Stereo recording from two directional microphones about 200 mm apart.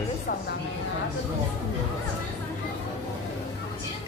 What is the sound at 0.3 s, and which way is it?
Speech, 40° left (ahead or behind).